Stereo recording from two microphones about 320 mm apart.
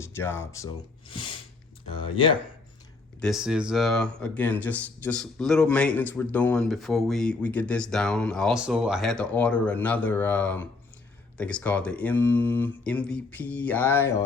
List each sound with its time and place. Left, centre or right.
0.0 s speech: centre
3.2 s speech: centre